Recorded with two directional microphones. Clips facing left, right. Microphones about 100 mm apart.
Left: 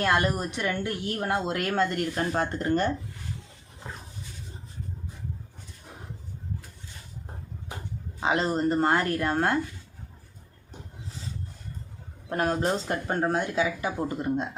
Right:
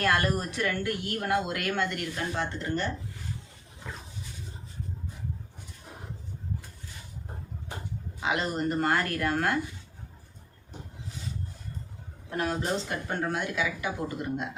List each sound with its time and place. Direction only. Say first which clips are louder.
0.0 s speech: left 2 dB; 20° left (ahead or behind); by 2.9 s 45° left (ahead or behind)
3.9 s a sound: left 1 dB; 30° left (ahead or behind)
8.2 s speech: left 4 dB; 35° left (ahead or behind)
12.3 s speech: left 4 dB; 45° left (ahead or behind)